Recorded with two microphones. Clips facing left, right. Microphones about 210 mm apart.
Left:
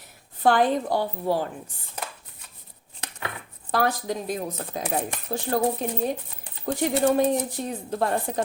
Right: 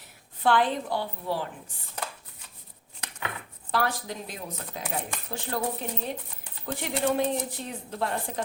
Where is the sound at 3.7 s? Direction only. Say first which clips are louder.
Left 4 dB; 45° left (ahead or behind).